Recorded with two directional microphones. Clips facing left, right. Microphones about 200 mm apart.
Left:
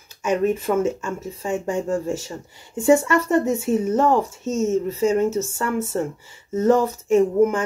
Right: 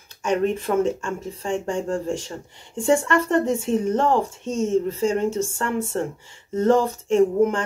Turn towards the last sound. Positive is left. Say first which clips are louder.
# left 1 dB
turn(degrees=5)  # may be behind; listen again after turning